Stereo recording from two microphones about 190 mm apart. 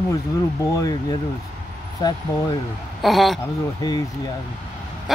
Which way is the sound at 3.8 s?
20° left (ahead or behind).